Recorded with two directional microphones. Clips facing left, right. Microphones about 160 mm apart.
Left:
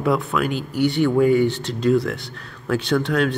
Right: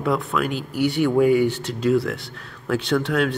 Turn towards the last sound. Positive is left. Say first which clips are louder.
# left 1 dB
turn(degrees=-5)  # may be behind; listen again after turning